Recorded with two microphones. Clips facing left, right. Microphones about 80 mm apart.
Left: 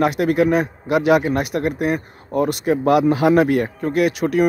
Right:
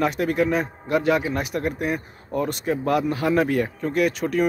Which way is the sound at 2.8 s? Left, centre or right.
Left.